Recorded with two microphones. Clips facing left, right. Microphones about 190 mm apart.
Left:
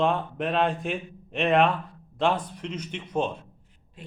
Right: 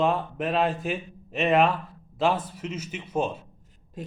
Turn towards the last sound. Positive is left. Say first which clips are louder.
# right 8 dB
turn(degrees=-40)  # may be behind; listen again after turning